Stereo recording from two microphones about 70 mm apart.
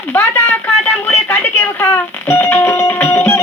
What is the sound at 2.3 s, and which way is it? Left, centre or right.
Music, left.